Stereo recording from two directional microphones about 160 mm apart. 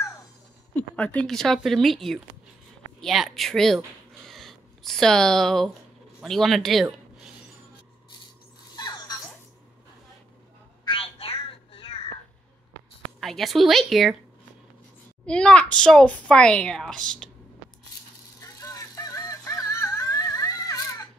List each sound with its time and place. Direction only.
0.7 s a child's voice: 10° left (ahead or behind)
8.7 s a sound: 25° left (ahead or behind)
10.9 s music: 35° left (ahead or behind)
13.2 s a child's voice: centre (ahead or behind)
15.2 s a child's voice: 5° left (ahead or behind)
18.4 s music: 20° left (ahead or behind)